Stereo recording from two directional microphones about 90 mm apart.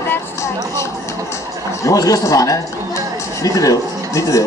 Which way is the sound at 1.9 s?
40° left (ahead or behind).